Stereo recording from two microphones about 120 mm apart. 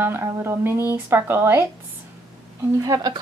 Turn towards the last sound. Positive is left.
turn(degrees=-30)  # may be behind; listen again after turning